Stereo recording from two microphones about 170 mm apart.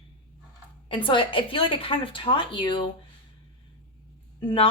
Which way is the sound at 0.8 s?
30° left (ahead or behind).